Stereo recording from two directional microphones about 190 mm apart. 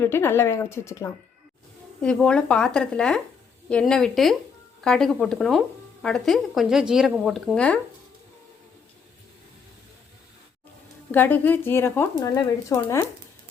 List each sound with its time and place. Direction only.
0.0 s speech: 10° left (ahead or behind)
2.0 s speech: 5° left (ahead or behind)
11.1 s speech: 10° left (ahead or behind)